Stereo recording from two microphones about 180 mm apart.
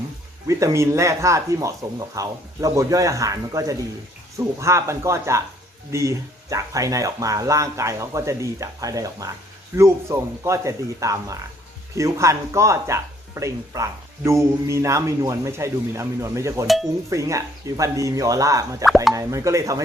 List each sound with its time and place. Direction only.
0.4 s speech: 15° right (ahead or behind)